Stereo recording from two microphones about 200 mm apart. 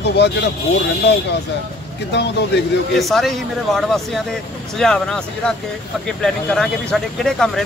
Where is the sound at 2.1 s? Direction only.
60° left (ahead or behind).